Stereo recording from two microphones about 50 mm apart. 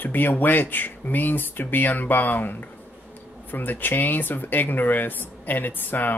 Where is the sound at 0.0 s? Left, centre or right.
Left.